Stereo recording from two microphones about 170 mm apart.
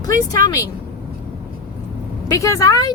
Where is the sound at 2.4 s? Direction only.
20° left (ahead or behind).